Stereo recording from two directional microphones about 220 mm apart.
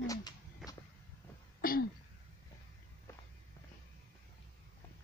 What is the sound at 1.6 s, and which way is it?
Throat clearing, 40° left (ahead or behind).